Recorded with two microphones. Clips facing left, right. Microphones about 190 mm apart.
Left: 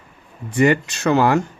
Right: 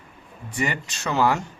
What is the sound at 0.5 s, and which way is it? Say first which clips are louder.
Speech: left 11 dB; 60° left (ahead or behind).